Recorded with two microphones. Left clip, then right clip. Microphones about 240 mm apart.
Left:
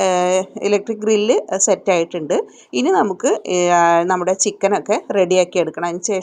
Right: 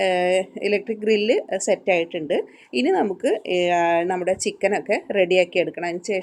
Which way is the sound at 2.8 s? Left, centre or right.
Left.